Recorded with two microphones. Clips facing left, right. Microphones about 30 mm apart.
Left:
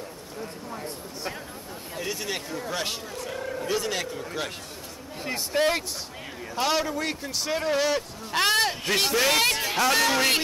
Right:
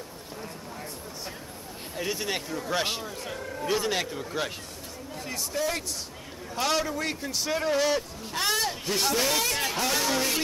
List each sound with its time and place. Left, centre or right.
2.0 s speech: centre
3.3 s a sound: centre
3.6 s speech: centre
5.2 s speech: left
6.5 s a man's voice: centre
8.4 s a man's voice: left